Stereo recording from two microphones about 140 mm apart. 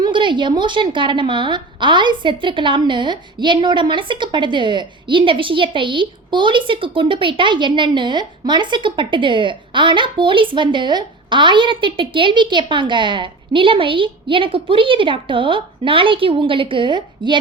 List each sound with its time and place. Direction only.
0.0 s a woman's voice: 35° right (ahead or behind)